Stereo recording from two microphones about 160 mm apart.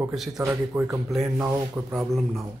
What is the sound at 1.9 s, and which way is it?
Speech, centre (ahead or behind).